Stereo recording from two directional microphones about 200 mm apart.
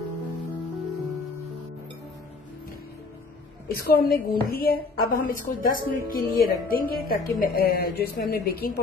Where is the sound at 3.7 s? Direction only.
50° left (ahead or behind).